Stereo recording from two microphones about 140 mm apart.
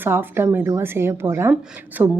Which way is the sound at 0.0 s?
15° right (ahead or behind).